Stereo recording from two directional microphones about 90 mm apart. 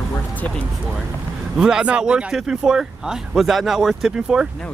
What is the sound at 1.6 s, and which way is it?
Speech, 10° right (ahead or behind).